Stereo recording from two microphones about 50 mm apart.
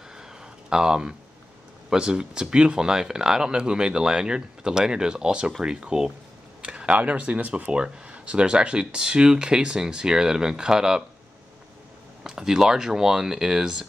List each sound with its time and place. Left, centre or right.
0.1 s a sound: centre
1.9 s speech: centre
12.2 s speech: centre